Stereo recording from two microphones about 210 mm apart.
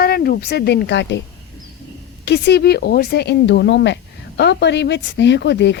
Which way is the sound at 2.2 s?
55° left (ahead or behind).